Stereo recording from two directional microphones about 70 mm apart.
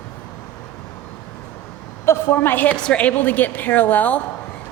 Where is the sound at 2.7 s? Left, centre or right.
Centre.